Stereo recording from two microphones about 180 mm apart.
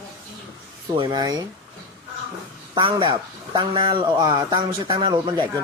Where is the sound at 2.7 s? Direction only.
25° right (ahead or behind).